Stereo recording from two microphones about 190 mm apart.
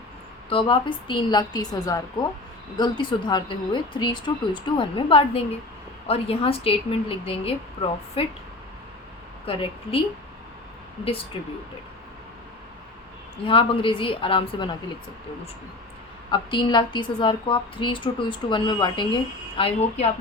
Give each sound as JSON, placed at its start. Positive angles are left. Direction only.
{"t": 0.5, "sound": "a woman's voice", "side_deg": 25}
{"t": 9.5, "sound": "a woman's voice", "side_deg": 30}
{"t": 11.3, "sound": "a woman's voice", "side_deg": 30}
{"t": 13.4, "sound": "a woman's voice", "side_deg": 30}
{"t": 16.3, "sound": "a woman's voice", "side_deg": 25}